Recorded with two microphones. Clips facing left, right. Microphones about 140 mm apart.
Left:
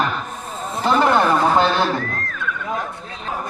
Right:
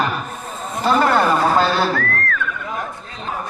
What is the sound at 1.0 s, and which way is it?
Speech, 15° left (ahead or behind).